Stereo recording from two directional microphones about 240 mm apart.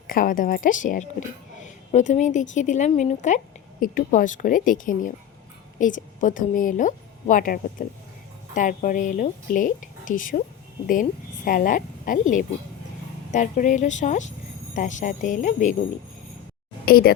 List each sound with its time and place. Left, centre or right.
0.1 s a woman's voice: left
11.4 s a woman's voice: left
13.3 s a woman's voice: left
16.8 s speech: left